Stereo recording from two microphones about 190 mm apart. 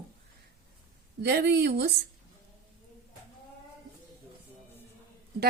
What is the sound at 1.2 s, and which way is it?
Speech, 60° right (ahead or behind).